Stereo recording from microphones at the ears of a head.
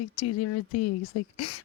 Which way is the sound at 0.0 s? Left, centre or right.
Left.